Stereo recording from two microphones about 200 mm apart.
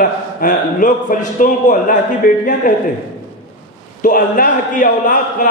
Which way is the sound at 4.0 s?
45° left (ahead or behind).